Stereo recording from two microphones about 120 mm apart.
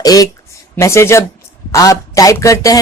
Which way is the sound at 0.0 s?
30° left (ahead or behind).